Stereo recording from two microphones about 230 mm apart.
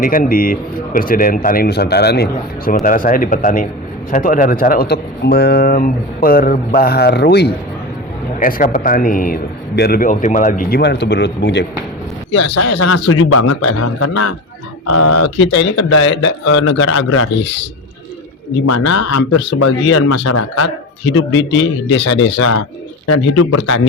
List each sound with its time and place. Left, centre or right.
0.0 s speech: left
12.5 s a man's voice: left
15.4 s a man's voice: left
18.6 s a man's voice: left
21.2 s a man's voice: left
23.0 s speech: left